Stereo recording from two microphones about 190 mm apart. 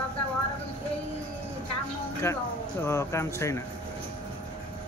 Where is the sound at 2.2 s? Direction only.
15° left (ahead or behind).